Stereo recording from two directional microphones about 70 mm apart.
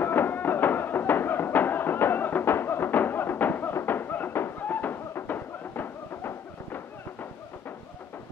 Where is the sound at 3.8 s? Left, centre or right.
Left.